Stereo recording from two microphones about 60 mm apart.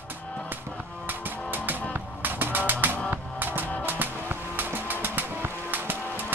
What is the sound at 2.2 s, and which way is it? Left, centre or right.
Music, right.